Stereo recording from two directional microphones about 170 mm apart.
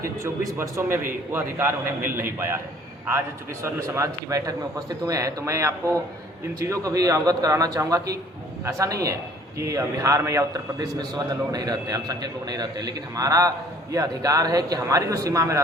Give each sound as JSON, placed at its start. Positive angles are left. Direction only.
{"t": 0.5, "sound": "a man's voice", "side_deg": -15}